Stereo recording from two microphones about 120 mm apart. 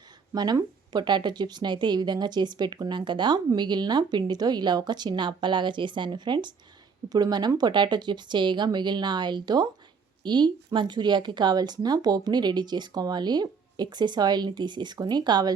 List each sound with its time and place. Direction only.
0.3 s speech: 35° right (ahead or behind)